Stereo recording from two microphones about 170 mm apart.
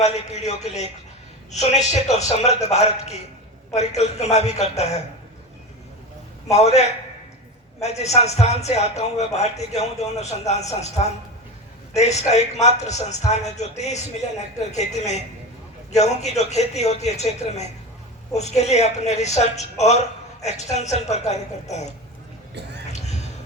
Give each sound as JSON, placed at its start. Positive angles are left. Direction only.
{"t": 0.0, "sound": "speech", "side_deg": 40}
{"t": 6.5, "sound": "speech", "side_deg": 40}
{"t": 22.9, "sound": "a sound", "side_deg": 40}